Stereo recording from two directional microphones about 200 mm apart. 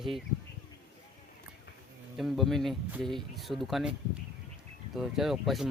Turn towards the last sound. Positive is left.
turn(degrees=0)  # may be behind; listen again after turning